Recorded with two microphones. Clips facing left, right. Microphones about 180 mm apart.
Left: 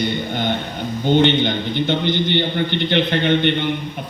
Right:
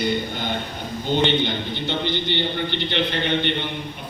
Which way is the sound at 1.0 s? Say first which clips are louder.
Left 5 dB; 60° left (ahead or behind).